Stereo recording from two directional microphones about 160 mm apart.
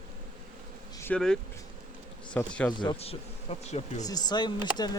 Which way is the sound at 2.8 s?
35° left (ahead or behind).